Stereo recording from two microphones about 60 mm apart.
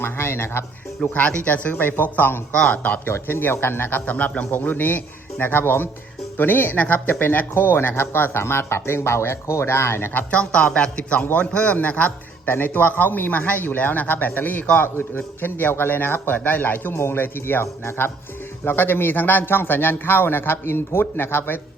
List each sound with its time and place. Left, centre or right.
0.0 s speech: left
1.1 s a man's voice: left
2.5 s a man's voice: centre
3.1 s a man's voice: left
4.0 s a man's voice: left
10.3 s a man's voice: centre
16.9 s a man's voice: left